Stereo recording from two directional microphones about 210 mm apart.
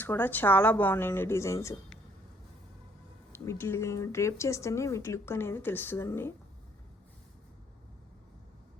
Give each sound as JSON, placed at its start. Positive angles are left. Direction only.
{"t": 0.0, "sound": "speech", "side_deg": 10}
{"t": 3.3, "sound": "speech", "side_deg": 15}